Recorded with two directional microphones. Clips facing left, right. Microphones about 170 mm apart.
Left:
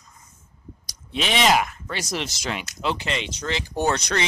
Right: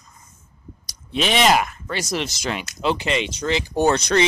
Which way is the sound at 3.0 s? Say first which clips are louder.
Right 5 dB; 10° right (ahead or behind).